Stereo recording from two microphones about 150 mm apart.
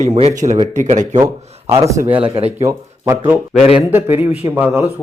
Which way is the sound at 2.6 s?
20° right (ahead or behind).